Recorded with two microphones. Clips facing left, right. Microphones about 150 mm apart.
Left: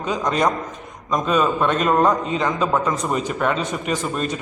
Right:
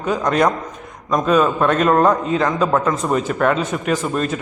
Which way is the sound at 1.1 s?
Centre (ahead or behind).